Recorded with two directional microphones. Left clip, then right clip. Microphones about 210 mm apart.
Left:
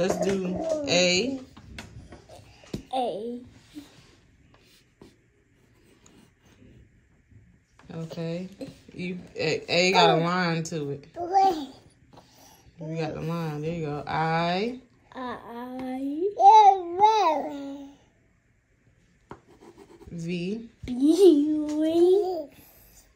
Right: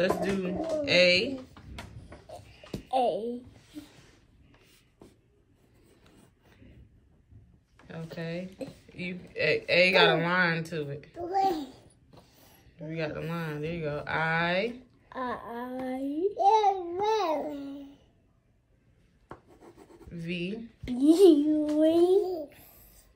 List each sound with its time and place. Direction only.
0.8 s speech: 15° left (ahead or behind)
1.5 s a sound: centre (ahead or behind)
8.2 s speech: 25° left (ahead or behind)
11.2 s babbling: centre (ahead or behind)
12.7 s speech: 25° left (ahead or behind)
15.0 s a child's voice: centre (ahead or behind)
19.2 s rub: centre (ahead or behind)
20.2 s speech: 25° left (ahead or behind)
20.8 s a child's voice: centre (ahead or behind)